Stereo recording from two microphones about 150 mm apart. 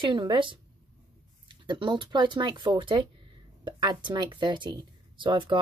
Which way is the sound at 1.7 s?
30° right (ahead or behind).